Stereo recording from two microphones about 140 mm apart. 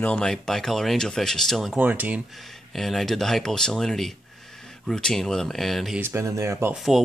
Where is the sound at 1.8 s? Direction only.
10° right (ahead or behind).